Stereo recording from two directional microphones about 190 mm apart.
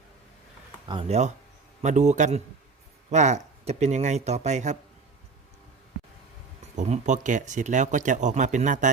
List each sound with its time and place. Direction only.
0.9 s speech: 30° right (ahead or behind)
6.7 s speech: 40° right (ahead or behind)